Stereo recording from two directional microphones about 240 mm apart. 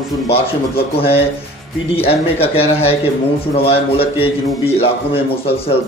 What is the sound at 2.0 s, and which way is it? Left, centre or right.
A man's voice, left.